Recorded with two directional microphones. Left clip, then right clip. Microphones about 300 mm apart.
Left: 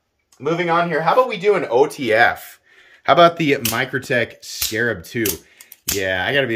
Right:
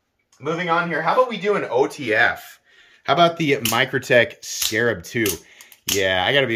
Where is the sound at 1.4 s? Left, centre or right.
Left.